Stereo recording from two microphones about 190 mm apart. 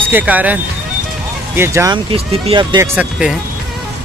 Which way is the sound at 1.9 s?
25° right (ahead or behind).